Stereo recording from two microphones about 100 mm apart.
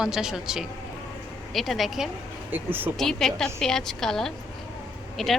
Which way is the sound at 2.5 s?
20° right (ahead or behind).